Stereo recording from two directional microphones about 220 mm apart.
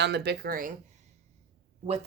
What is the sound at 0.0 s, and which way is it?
Speech, 50° right (ahead or behind).